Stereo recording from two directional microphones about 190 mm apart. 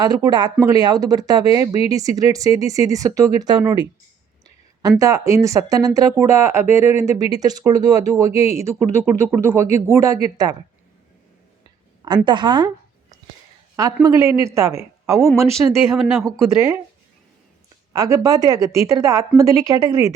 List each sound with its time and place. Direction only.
0.0 s speech: 20° right (ahead or behind)
4.8 s speech: 20° right (ahead or behind)
12.0 s a woman's voice: 25° right (ahead or behind)
17.9 s speech: 20° right (ahead or behind)